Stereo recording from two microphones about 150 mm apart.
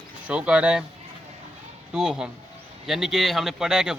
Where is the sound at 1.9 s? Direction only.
5° right (ahead or behind).